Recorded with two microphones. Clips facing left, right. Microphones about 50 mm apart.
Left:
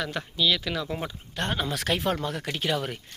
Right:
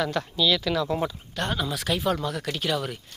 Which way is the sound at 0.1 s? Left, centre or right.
Centre.